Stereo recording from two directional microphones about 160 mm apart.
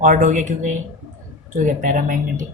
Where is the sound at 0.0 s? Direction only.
50° right (ahead or behind).